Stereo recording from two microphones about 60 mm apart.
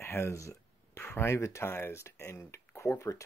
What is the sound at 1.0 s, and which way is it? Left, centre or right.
Speech, left.